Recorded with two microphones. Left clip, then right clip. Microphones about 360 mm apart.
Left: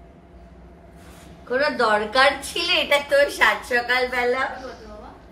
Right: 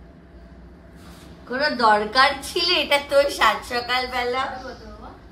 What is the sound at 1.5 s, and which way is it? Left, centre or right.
A woman's voice, right.